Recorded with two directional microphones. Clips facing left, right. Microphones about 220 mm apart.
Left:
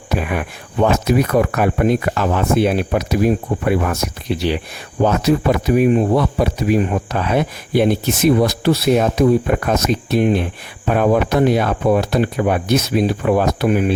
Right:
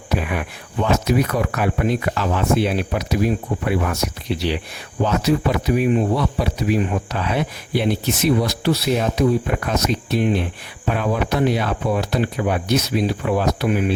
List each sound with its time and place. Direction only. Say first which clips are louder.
0.1 s speech: left 2 dB; 50° left (ahead or behind)